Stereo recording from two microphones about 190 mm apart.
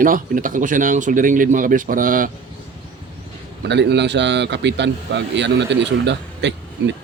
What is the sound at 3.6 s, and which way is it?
A man's voice, 65° right (ahead or behind).